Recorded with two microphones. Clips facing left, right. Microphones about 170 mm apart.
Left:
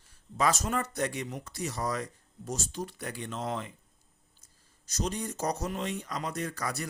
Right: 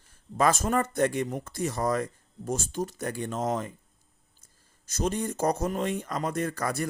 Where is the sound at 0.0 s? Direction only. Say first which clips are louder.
Right 4 dB; 50° right (ahead or behind).